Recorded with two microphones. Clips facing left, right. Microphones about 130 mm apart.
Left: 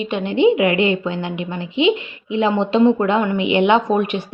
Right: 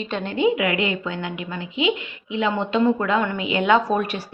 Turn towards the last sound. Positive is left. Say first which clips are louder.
# left 3 dB
turn(degrees=20)  # may be behind; listen again after turning